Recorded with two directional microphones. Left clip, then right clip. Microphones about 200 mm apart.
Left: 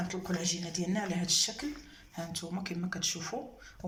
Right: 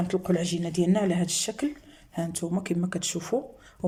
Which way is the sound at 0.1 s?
55° right (ahead or behind).